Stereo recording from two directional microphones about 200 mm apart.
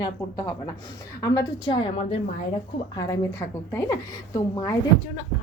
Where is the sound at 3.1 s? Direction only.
15° left (ahead or behind).